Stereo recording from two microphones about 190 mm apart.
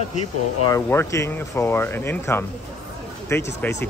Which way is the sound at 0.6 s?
15° left (ahead or behind).